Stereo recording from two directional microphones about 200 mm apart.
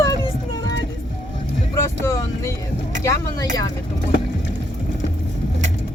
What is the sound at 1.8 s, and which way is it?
Vehicle, 15° left (ahead or behind).